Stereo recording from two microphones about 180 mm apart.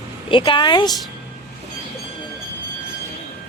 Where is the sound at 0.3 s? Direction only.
25° left (ahead or behind).